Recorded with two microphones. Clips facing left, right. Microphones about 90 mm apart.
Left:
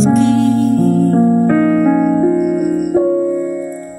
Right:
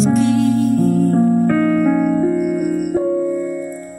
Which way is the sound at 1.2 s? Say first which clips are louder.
Left 3 dB; 40° left (ahead or behind).